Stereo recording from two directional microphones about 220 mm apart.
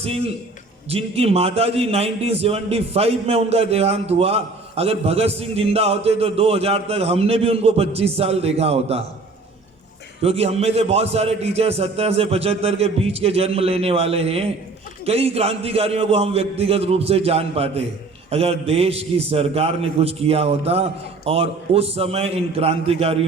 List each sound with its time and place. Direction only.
0.9 s a man's voice: 25° right (ahead or behind)
10.2 s a man's voice: 25° right (ahead or behind)